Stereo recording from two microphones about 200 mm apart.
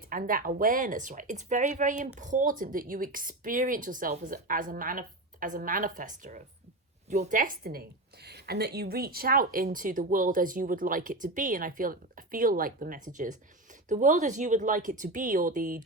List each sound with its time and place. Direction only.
0.1 s a woman's voice: 45° right (ahead or behind)